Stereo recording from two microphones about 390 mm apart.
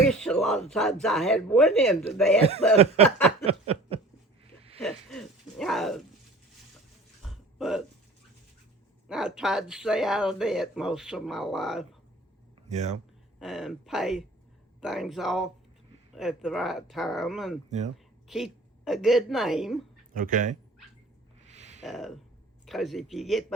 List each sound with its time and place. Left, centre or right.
0.1 s a sound: centre
0.7 s speech: centre
2.7 s snicker: centre
4.8 s a sound: centre
7.3 s a sound: centre
9.0 s speech: centre
12.6 s speech: centre
13.4 s speech: centre
17.7 s speech: centre
17.9 s a woman's voice: centre
20.1 s speech: centre
21.4 s a sound: centre
21.8 s speech: centre